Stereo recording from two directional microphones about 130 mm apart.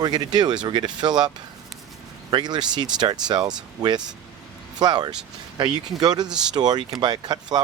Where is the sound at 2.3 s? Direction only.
35° right (ahead or behind).